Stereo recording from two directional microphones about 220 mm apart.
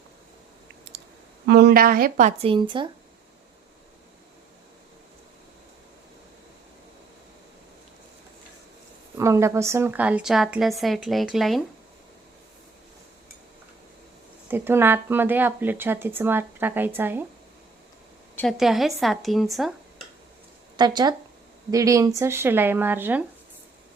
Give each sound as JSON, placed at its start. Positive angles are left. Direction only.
{"t": 1.5, "sound": "speech", "side_deg": -50}
{"t": 9.1, "sound": "a woman's voice", "side_deg": -15}
{"t": 14.4, "sound": "speech", "side_deg": -10}
{"t": 18.3, "sound": "a woman's voice", "side_deg": 0}
{"t": 20.7, "sound": "speech", "side_deg": -20}